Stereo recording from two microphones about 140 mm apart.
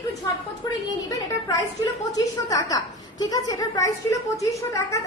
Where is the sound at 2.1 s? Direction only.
25° left (ahead or behind).